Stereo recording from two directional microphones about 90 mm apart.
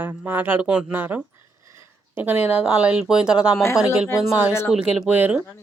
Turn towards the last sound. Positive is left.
turn(degrees=-15)  # may be behind; listen again after turning